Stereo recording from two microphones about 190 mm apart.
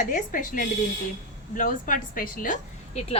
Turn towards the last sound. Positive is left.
turn(degrees=40)  # may be behind; listen again after turning